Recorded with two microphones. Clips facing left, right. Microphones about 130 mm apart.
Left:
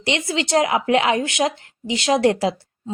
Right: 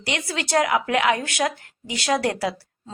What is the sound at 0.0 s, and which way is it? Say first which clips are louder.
A woman's voice: left 5 dB; 25° left (ahead or behind).